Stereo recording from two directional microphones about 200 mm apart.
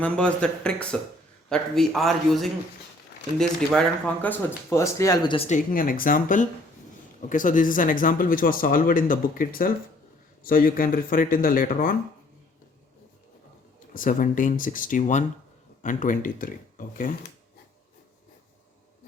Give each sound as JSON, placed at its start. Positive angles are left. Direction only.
{"t": 0.0, "sound": "a man's voice", "side_deg": 5}
{"t": 5.5, "sound": "speech", "side_deg": 40}
{"t": 13.9, "sound": "speech", "side_deg": 45}